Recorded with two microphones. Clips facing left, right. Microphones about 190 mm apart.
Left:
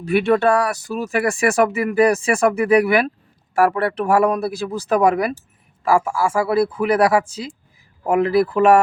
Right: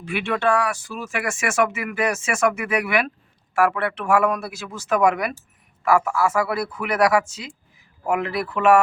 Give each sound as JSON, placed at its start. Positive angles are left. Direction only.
{"t": 0.0, "sound": "speech", "side_deg": 40}